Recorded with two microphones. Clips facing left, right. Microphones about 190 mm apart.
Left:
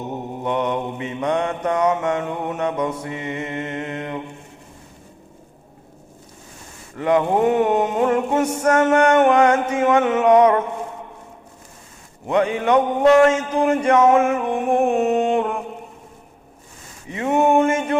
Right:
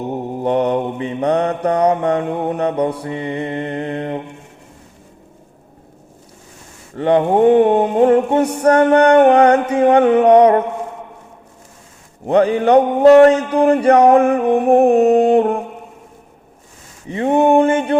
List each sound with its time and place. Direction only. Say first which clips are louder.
0.3 s mantra: right 6 dB; 35° right (ahead or behind)
6.9 s mantra: right 4 dB; 30° right (ahead or behind)
12.2 s mantra: right 6 dB; 35° right (ahead or behind)
17.1 s mantra: right 4 dB; 35° right (ahead or behind)